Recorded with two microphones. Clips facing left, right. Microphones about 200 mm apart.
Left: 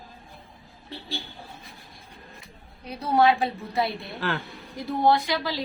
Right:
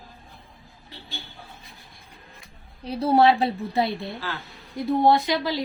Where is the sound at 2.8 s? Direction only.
30° right (ahead or behind).